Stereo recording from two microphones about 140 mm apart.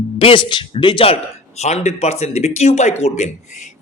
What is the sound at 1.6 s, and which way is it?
A man's voice, 55° left (ahead or behind).